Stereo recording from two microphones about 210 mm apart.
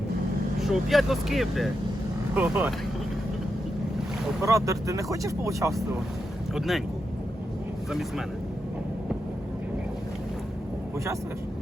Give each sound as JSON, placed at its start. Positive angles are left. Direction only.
{"t": 0.6, "sound": "speech", "side_deg": 0}
{"t": 4.4, "sound": "speech", "side_deg": -15}
{"t": 6.5, "sound": "speech", "side_deg": 0}